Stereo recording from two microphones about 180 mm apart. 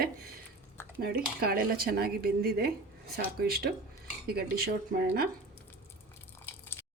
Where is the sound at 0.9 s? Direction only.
60° right (ahead or behind).